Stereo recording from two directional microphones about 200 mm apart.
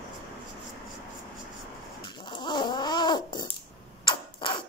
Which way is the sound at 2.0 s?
25° left (ahead or behind).